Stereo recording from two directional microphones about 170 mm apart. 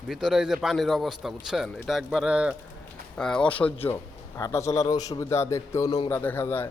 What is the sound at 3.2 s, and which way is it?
Speech, 5° left (ahead or behind).